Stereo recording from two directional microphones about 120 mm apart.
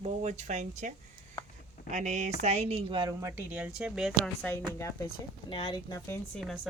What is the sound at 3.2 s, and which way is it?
Speech, 20° right (ahead or behind).